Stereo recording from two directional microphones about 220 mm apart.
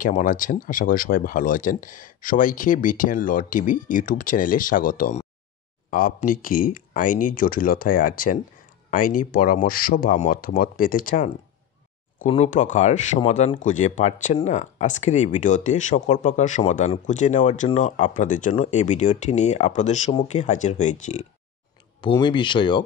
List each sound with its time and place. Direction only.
0.0 s speech: 40° left (ahead or behind)
22.0 s speech: 20° left (ahead or behind)